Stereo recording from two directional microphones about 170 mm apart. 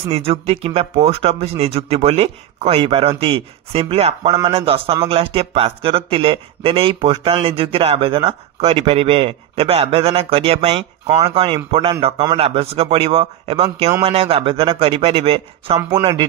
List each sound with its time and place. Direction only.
0.1 s speech: 35° right (ahead or behind)